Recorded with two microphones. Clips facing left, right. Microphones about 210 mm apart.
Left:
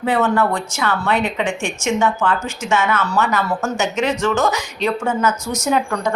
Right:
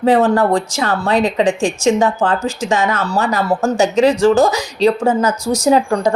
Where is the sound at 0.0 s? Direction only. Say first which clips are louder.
Right 5 dB; 35° right (ahead or behind).